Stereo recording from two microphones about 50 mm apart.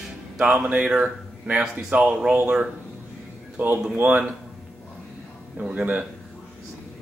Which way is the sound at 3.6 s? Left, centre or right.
Right.